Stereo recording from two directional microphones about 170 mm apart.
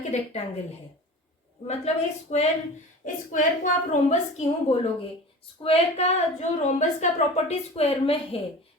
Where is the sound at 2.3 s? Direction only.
40° left (ahead or behind).